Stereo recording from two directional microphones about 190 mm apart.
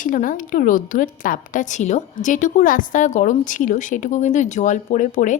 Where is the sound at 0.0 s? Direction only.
45° left (ahead or behind).